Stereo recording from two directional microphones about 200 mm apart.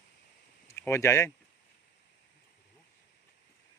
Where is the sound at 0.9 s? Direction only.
15° left (ahead or behind).